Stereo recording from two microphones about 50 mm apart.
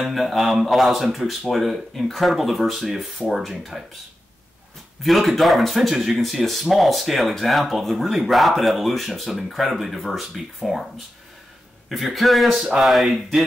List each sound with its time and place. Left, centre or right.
0.0 s speech: centre
5.0 s speech: centre
11.9 s speech: centre